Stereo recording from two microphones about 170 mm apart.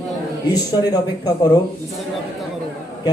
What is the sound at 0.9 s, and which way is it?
Speech, 25° left (ahead or behind).